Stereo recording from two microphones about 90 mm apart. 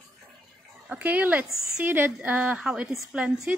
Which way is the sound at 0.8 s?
15° right (ahead or behind).